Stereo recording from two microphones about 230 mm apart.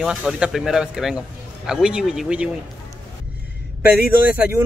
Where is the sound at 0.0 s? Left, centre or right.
Centre.